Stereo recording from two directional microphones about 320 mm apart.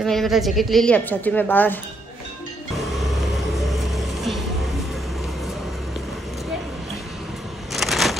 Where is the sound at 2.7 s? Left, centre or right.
Centre.